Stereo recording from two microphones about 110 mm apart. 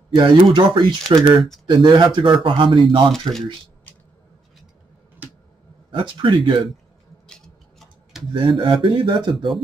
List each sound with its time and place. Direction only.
0.1 s speech: 45° right (ahead or behind)
5.9 s speech: 50° right (ahead or behind)
7.2 s tick-tock: 5° left (ahead or behind)
8.3 s speech: 50° right (ahead or behind)